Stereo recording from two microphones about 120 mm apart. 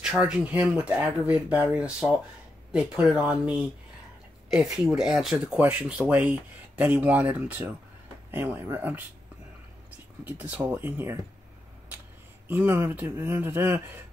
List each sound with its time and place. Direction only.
0.0 s speech: 5° right (ahead or behind)
12.4 s speech: 15° right (ahead or behind)